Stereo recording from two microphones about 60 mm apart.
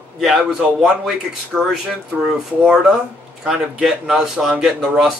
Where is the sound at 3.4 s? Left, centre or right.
Centre.